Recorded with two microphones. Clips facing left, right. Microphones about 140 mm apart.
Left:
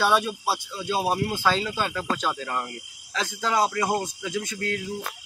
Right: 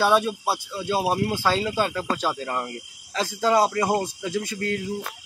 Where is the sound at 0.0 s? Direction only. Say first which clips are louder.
Right 2 dB; 5° right (ahead or behind).